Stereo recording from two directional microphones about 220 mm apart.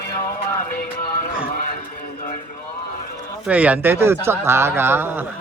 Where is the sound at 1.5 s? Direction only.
40° left (ahead or behind).